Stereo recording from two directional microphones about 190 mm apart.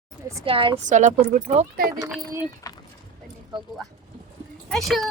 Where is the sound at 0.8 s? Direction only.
40° right (ahead or behind).